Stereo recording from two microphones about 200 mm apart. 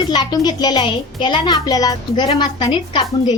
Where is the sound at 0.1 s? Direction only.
20° left (ahead or behind).